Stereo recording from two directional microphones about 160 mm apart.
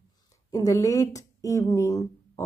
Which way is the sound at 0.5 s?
20° left (ahead or behind).